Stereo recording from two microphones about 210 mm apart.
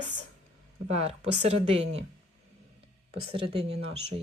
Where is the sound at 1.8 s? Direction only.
60° right (ahead or behind).